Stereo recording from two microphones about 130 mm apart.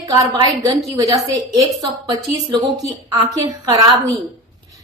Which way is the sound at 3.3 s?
30° right (ahead or behind).